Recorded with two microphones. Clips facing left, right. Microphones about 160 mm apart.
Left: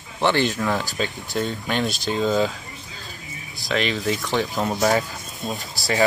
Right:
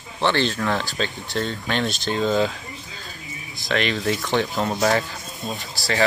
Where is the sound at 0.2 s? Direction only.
15° left (ahead or behind).